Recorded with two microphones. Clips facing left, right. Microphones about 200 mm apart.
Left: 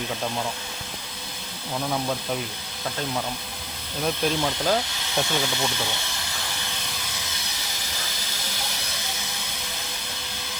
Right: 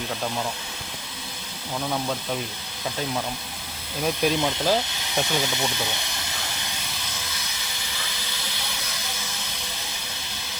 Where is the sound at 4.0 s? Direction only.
5° right (ahead or behind).